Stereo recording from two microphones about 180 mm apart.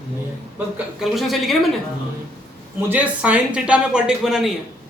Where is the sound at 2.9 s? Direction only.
10° right (ahead or behind).